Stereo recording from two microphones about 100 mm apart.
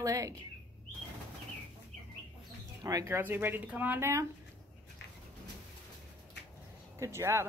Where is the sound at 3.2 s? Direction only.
20° right (ahead or behind).